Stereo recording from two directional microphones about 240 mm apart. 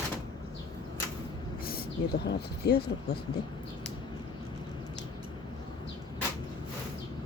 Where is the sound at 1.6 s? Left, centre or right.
Left.